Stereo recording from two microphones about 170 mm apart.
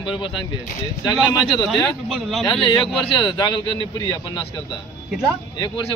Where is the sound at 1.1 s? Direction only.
5° right (ahead or behind).